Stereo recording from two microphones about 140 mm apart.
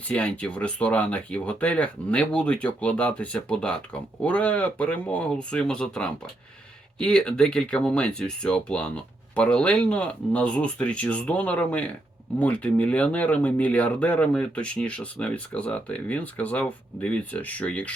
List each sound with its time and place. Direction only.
0.1 s speech: 10° left (ahead or behind)